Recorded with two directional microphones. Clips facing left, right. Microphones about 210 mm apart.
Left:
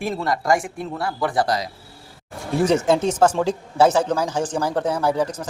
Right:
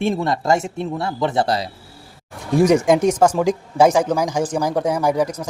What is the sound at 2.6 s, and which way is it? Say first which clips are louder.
Speech: right 3 dB; 10° right (ahead or behind).